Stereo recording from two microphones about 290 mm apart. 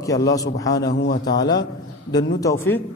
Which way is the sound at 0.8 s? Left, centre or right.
Left.